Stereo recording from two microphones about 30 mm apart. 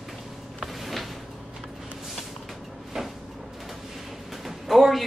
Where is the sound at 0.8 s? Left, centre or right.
Centre.